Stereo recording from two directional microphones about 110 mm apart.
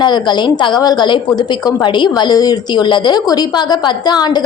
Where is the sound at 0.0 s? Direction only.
40° left (ahead or behind).